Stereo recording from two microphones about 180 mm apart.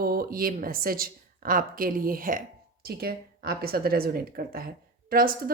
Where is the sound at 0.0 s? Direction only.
55° right (ahead or behind).